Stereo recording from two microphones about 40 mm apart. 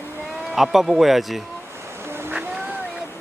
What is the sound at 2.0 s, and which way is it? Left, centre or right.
Boat, right.